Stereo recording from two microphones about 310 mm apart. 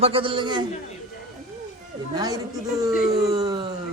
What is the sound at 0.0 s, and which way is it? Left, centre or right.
Speech, centre.